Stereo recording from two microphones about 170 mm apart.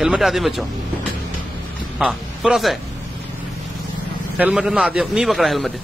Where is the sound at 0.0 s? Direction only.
Centre (ahead or behind).